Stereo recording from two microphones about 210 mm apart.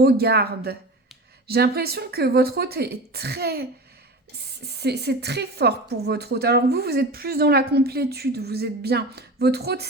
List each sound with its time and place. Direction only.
0.0 s a woman's voice: 50° right (ahead or behind)